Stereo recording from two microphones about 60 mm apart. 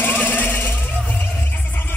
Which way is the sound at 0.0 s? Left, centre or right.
Left.